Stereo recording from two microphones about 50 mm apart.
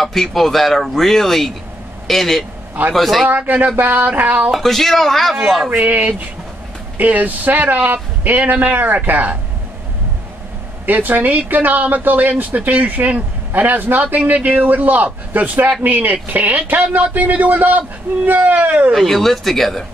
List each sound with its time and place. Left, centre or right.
0.0 s speech: centre
3.3 s a woman's voice: right
4.5 s speech: centre
5.7 s a woman's voice: right
10.9 s a woman's voice: right
18.9 s speech: centre